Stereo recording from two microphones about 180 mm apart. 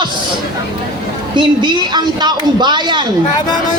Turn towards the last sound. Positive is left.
turn(degrees=-25)  # may be behind; listen again after turning